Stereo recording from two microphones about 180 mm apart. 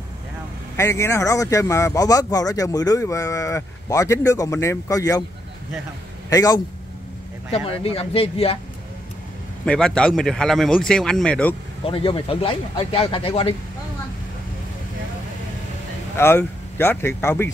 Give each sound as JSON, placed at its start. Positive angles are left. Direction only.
{"t": 0.7, "sound": "speech", "side_deg": 15}
{"t": 6.3, "sound": "a man's voice", "side_deg": 20}
{"t": 7.5, "sound": "speech", "side_deg": 35}
{"t": 9.7, "sound": "speech", "side_deg": 5}
{"t": 11.8, "sound": "speech", "side_deg": 30}
{"t": 16.2, "sound": "speech", "side_deg": 15}